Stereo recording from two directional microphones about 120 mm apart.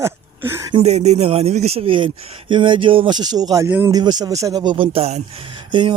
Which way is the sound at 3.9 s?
35° right (ahead or behind).